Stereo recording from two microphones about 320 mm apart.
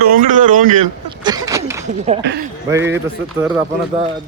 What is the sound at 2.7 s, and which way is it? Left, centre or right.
Speech, centre.